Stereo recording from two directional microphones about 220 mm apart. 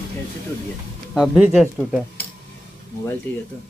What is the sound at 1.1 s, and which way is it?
Speech, 5° right (ahead or behind).